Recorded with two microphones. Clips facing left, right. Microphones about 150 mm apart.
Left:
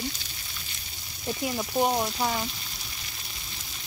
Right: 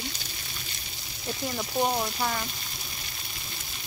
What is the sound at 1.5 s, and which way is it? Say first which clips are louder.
Speech: left 2 dB; 10° left (ahead or behind).